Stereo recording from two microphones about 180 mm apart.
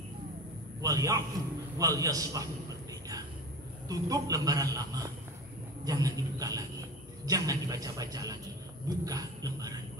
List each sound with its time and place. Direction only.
0.7 s a man's voice: 20° right (ahead or behind)